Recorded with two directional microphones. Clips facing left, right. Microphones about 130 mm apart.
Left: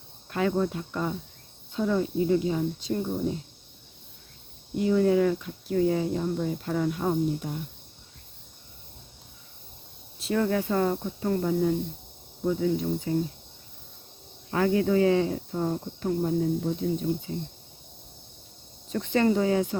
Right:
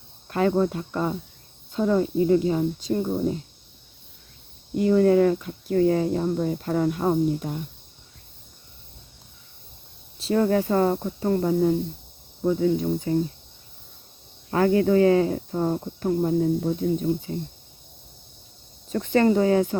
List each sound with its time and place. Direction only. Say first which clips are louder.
0.3 s speech: right 4 dB; 45° right (ahead or behind)
4.8 s speech: right 4 dB; 50° right (ahead or behind)
10.2 s speech: right 4 dB; 30° right (ahead or behind)
14.5 s speech: right 4 dB; 50° right (ahead or behind)
18.9 s speech: right 4 dB; 45° right (ahead or behind)